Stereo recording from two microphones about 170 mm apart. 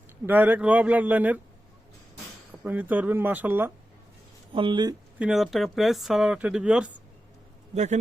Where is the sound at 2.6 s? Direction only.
10° right (ahead or behind).